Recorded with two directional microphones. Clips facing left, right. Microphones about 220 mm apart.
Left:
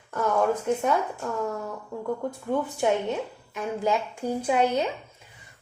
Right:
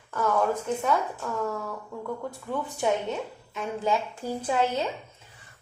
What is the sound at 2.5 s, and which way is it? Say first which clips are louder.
A woman's voice: left 3 dB; 15° left (ahead or behind).